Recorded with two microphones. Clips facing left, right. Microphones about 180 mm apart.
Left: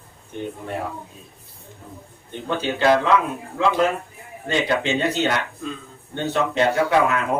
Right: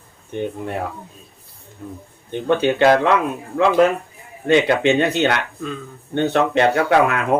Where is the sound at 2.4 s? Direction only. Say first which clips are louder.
Right 5 dB; 60° right (ahead or behind).